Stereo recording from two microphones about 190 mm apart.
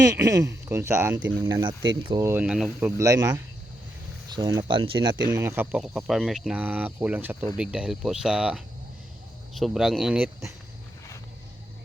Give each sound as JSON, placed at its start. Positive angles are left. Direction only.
{"t": 0.0, "sound": "speech", "side_deg": -15}
{"t": 2.8, "sound": "speech", "side_deg": -15}
{"t": 5.3, "sound": "speech", "side_deg": -15}